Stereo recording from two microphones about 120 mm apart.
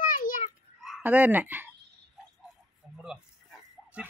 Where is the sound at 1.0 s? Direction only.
15° right (ahead or behind).